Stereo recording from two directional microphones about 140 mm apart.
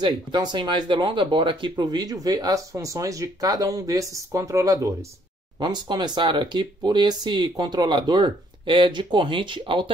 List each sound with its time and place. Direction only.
0.0 s speech: 30° right (ahead or behind)